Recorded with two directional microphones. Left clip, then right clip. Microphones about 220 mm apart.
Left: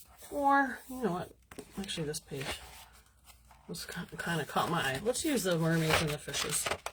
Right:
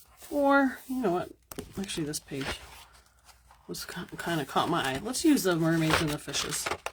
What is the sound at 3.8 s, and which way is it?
Speech, 50° right (ahead or behind).